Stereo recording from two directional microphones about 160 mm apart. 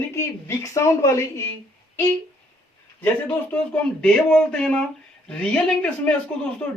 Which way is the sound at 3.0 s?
10° left (ahead or behind).